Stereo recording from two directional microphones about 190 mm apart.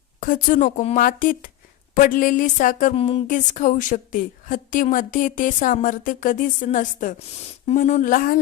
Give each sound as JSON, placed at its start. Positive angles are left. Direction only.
{"t": 0.2, "sound": "speech", "side_deg": 45}
{"t": 2.9, "sound": "speech", "side_deg": 30}